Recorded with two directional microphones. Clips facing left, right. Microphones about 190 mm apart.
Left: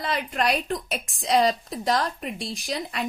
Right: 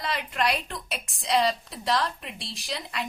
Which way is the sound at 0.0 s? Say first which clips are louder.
Left 2 dB; 50° left (ahead or behind).